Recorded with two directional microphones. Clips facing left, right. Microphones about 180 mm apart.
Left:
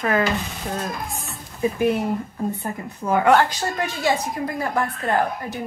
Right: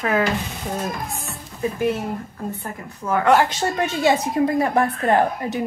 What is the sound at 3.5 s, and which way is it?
A woman's voice, 25° right (ahead or behind).